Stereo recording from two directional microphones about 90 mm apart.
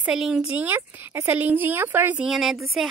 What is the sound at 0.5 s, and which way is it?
A woman's voice, 20° right (ahead or behind).